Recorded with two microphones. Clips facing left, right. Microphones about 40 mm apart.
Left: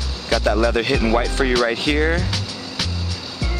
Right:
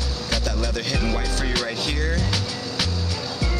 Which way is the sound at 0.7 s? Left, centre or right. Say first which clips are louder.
Left 7 dB; left.